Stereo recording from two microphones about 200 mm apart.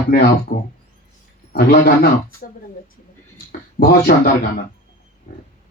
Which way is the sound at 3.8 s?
50° left (ahead or behind).